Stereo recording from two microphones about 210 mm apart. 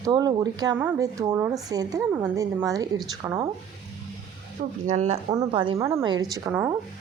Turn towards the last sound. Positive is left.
turn(degrees=-10)  # may be behind; listen again after turning